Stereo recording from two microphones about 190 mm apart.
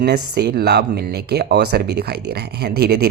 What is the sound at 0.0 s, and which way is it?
Speech, 60° right (ahead or behind).